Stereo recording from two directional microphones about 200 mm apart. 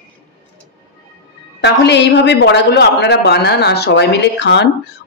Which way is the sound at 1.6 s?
60° left (ahead or behind).